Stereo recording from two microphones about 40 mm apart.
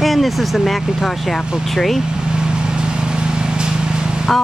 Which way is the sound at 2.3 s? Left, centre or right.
Right.